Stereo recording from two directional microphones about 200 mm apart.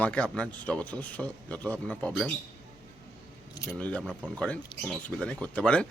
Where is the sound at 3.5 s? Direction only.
15° left (ahead or behind).